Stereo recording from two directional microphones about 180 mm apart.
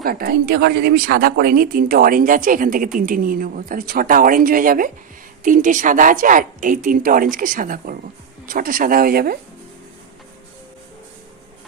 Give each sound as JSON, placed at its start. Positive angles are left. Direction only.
{"t": 0.0, "sound": "a woman's voice", "side_deg": -55}